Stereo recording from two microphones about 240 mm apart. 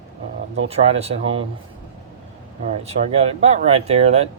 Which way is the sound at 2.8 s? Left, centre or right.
Right.